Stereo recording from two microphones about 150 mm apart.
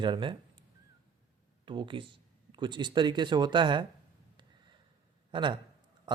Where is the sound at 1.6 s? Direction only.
35° right (ahead or behind).